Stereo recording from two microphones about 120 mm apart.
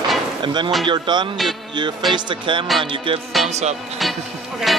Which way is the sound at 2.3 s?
45° right (ahead or behind).